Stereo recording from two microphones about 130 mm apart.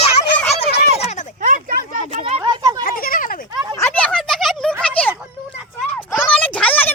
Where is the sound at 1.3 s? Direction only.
85° right.